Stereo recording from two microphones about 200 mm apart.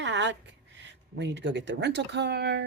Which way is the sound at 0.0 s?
60° right (ahead or behind).